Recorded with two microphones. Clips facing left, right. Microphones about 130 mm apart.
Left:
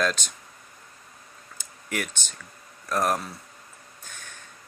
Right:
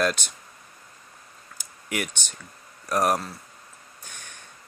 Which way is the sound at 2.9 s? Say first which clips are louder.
Right 2 dB; 10° right (ahead or behind).